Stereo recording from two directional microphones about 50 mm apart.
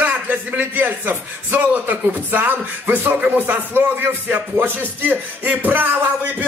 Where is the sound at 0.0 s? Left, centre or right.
Right.